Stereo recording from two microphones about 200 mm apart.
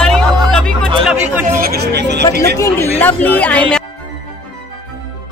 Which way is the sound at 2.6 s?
10° left (ahead or behind).